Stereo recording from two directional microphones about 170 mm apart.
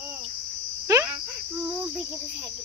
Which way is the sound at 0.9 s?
20° right (ahead or behind).